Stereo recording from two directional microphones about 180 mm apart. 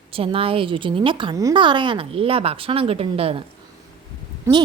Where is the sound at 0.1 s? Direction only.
30° right (ahead or behind).